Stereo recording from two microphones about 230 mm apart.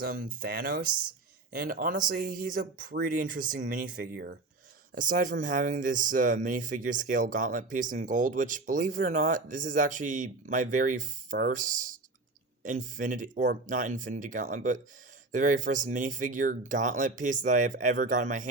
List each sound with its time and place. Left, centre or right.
0.0 s speech: right